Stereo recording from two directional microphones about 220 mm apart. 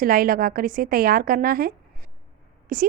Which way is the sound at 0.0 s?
40° right (ahead or behind).